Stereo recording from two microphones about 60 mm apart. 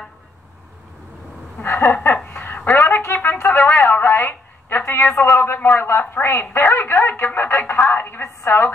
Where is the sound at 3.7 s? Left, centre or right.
Left.